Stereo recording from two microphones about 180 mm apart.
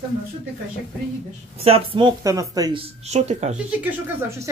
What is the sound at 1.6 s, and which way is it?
A man's voice, 30° right (ahead or behind).